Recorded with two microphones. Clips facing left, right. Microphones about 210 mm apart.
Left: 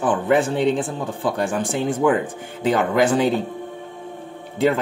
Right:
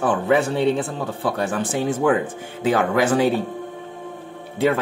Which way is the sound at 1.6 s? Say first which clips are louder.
Even; 5° right (ahead or behind).